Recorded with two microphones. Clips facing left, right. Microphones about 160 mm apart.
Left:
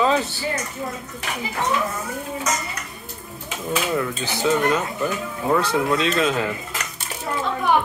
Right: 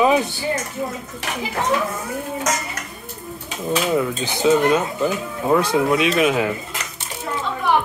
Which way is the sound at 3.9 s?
15° right (ahead or behind).